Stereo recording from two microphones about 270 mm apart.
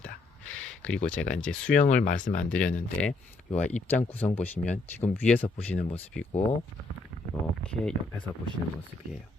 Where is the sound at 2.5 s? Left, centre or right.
Centre.